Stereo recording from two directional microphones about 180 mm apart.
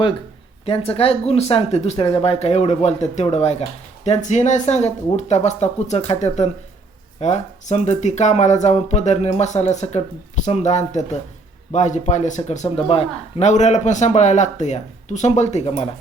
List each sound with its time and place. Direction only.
0.6 s speech: 35° left (ahead or behind)